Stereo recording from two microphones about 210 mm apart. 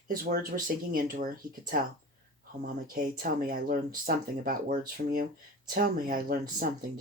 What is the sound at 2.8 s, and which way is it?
Speech, 40° right (ahead or behind).